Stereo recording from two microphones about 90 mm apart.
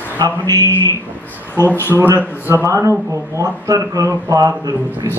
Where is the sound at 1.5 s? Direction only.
25° left (ahead or behind).